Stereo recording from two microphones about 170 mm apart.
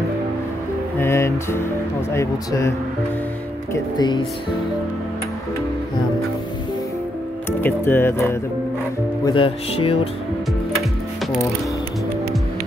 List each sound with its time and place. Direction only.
0.9 s speech: 15° left (ahead or behind)
3.7 s speech: 25° left (ahead or behind)
7.6 s speech: 10° left (ahead or behind)
9.2 s speech: 30° left (ahead or behind)